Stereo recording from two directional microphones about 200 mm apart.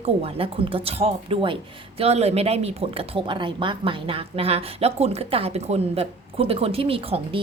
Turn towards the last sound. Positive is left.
turn(degrees=-30)  # may be behind; listen again after turning